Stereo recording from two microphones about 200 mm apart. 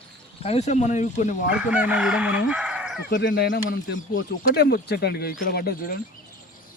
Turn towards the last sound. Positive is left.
turn(degrees=50)  # may be behind; listen again after turning